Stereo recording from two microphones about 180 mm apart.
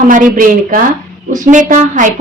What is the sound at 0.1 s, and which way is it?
A woman's voice, 50° right (ahead or behind).